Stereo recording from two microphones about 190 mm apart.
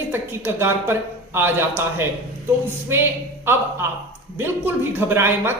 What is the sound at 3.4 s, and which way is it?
A woman's voice, 10° right (ahead or behind).